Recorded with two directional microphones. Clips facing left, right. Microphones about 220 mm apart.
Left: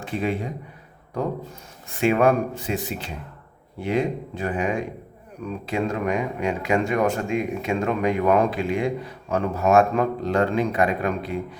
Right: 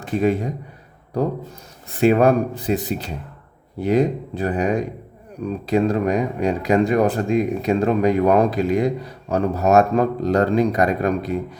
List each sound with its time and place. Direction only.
0.0 s a man's voice: 40° right (ahead or behind)
1.9 s speech: 35° right (ahead or behind)